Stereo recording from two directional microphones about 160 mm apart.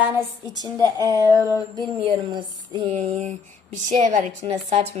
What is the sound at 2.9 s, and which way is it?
Speech, 45° right (ahead or behind).